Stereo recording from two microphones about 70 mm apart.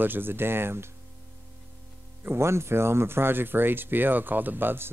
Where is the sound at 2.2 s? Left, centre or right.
Right.